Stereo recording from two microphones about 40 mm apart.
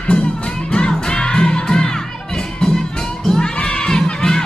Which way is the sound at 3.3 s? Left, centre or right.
Left.